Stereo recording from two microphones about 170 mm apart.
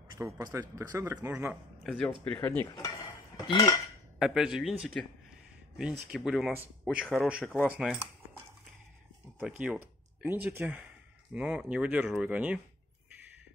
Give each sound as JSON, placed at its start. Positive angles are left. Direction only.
{"t": 0.2, "sound": "speech", "side_deg": -20}
{"t": 2.4, "sound": "cutlery", "side_deg": 15}
{"t": 4.2, "sound": "speech", "side_deg": -5}
{"t": 9.4, "sound": "speech", "side_deg": -10}